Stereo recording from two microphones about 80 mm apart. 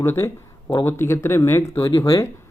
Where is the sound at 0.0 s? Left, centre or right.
Left.